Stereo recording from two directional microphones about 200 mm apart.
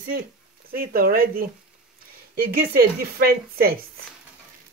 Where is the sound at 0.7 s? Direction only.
45° right (ahead or behind).